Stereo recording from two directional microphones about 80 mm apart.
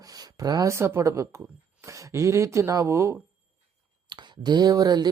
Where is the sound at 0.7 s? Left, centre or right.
Right.